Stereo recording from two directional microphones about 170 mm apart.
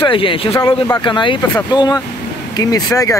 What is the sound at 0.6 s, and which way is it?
Speech, 15° left (ahead or behind).